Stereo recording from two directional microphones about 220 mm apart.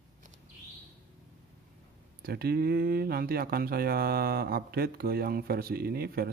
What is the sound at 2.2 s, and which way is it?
Speech, 45° right (ahead or behind).